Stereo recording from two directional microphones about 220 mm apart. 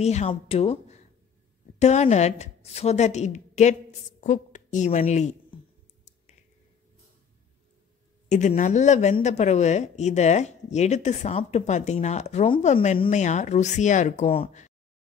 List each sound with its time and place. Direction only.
0.0 s a woman's voice: 30° left (ahead or behind)
8.3 s speech: 35° left (ahead or behind)